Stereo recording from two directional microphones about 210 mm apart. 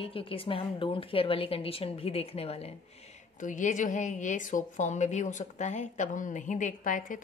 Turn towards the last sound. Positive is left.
turn(degrees=40)  # may be behind; listen again after turning